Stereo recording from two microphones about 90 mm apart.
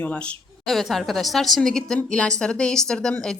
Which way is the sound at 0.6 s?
Centre (ahead or behind).